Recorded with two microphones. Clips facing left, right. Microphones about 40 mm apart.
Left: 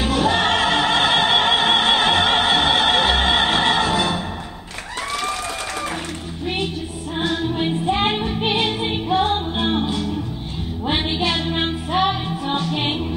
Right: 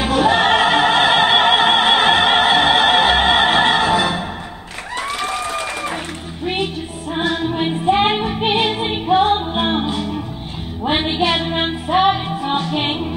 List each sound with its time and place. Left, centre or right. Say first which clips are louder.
0.0 s music: right 4 dB; centre
6.4 s music: right 3 dB; centre